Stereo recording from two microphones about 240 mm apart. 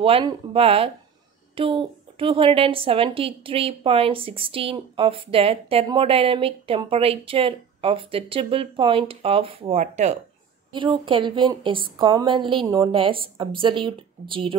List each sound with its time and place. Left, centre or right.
0.0 s a woman's voice: right